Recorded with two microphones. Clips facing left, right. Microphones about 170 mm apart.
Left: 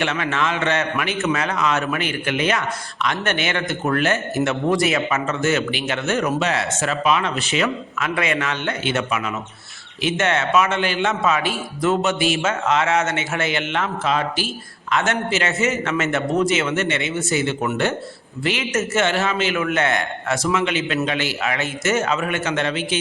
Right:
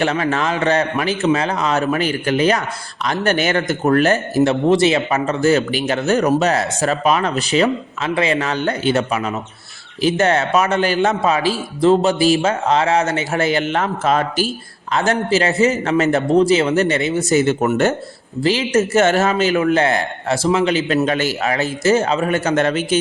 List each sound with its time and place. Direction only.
0.0 s a man's voice: 35° right (ahead or behind)
18.4 s a man's voice: 35° right (ahead or behind)